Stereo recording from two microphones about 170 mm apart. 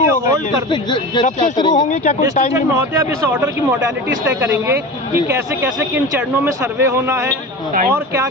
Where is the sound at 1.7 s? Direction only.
45° left (ahead or behind).